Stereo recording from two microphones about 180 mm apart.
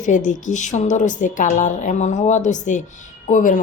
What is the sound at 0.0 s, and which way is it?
A woman's voice, 45° left (ahead or behind).